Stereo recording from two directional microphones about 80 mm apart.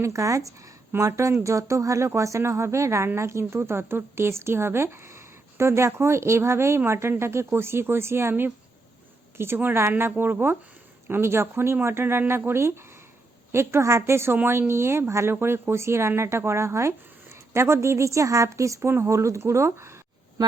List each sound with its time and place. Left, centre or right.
0.0 s speech: right